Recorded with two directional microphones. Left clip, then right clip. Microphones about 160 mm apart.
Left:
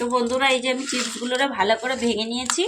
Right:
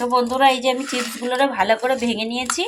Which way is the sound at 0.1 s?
45° right (ahead or behind).